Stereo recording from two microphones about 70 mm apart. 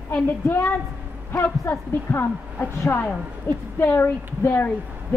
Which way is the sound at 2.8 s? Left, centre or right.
Left.